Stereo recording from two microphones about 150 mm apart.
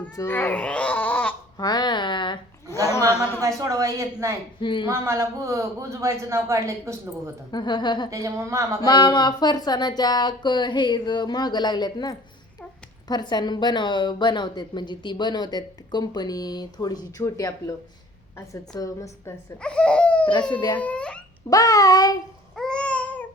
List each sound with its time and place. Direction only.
0.2 s speech: 15° left (ahead or behind)
1.5 s speech: 25° left (ahead or behind)
3.1 s speech: 15° left (ahead or behind)
3.6 s speech: 20° right (ahead or behind)
4.6 s a woman's voice: 35° left (ahead or behind)
4.9 s speech: 20° right (ahead or behind)
7.5 s a woman's voice: 30° left (ahead or behind)
8.1 s speech: 20° right (ahead or behind)
8.8 s a woman's voice: 25° left (ahead or behind)
19.6 s speech: 5° left (ahead or behind)
20.5 s a woman's voice: 30° left (ahead or behind)
20.7 s speech: 10° left (ahead or behind)
21.5 s a woman's voice: 25° left (ahead or behind)
22.5 s babbling: 5° left (ahead or behind)